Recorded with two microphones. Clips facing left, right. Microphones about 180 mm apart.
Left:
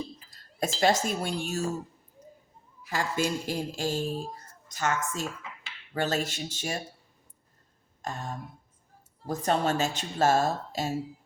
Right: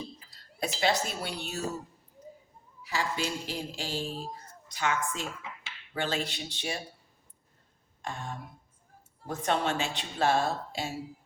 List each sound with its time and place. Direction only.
0.8 s a woman's voice: 45° left (ahead or behind)
2.8 s a woman's voice: 50° left (ahead or behind)
8.0 s a woman's voice: 40° left (ahead or behind)